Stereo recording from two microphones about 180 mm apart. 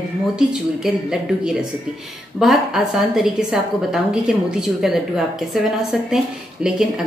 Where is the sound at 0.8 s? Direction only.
Centre (ahead or behind).